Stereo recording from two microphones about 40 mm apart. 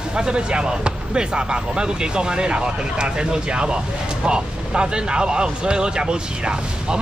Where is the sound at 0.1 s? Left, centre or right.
Right.